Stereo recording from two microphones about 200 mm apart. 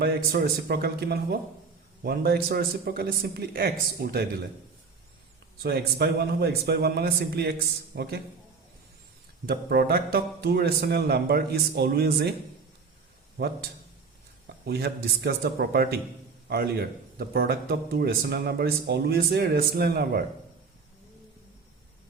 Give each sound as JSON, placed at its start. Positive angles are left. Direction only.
{"t": 0.0, "sound": "speech", "side_deg": -50}
{"t": 5.6, "sound": "a man's voice", "side_deg": -55}
{"t": 9.5, "sound": "speech", "side_deg": -50}
{"t": 14.4, "sound": "speech", "side_deg": -55}